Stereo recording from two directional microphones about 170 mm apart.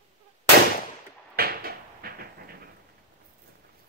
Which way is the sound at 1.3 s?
60° right (ahead or behind).